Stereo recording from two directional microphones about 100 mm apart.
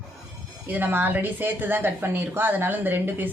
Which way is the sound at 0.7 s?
20° right (ahead or behind).